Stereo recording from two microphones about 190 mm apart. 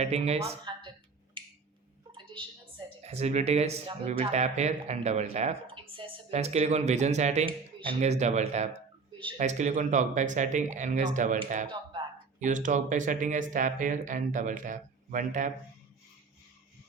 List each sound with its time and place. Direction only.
0.0 s speech: 35° right (ahead or behind)
2.1 s a sound: 25° right (ahead or behind)
3.0 s speech: 35° right (ahead or behind)